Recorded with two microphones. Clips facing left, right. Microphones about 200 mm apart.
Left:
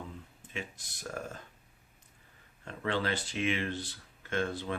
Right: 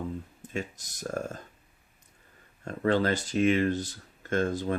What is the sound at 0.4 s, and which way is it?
Speech, 40° right (ahead or behind).